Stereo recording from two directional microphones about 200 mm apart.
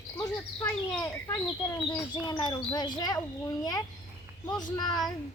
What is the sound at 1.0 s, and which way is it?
A child's voice, 20° left (ahead or behind).